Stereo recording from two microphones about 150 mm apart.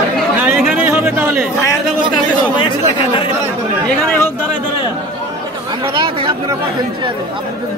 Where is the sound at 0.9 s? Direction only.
15° right (ahead or behind).